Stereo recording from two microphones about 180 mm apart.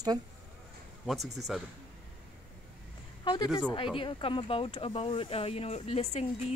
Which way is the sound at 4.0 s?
30° left (ahead or behind).